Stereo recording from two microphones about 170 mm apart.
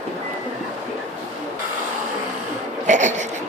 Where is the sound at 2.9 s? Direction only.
45° right (ahead or behind).